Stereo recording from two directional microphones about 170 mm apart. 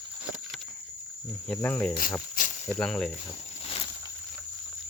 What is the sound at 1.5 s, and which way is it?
Speech, 10° left (ahead or behind).